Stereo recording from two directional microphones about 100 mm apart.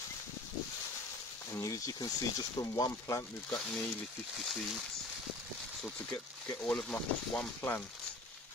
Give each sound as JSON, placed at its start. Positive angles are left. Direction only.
{"t": 1.5, "sound": "speech", "side_deg": 35}
{"t": 3.4, "sound": "speech", "side_deg": 5}
{"t": 6.6, "sound": "speech", "side_deg": 10}